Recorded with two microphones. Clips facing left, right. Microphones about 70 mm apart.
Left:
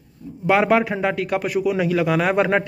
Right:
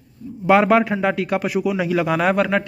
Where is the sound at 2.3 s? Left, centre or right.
Left.